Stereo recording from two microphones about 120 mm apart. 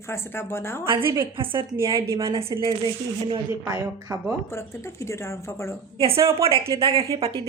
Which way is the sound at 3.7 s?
25° right (ahead or behind).